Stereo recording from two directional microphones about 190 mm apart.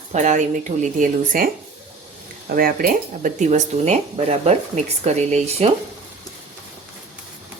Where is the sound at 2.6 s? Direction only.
50° right (ahead or behind).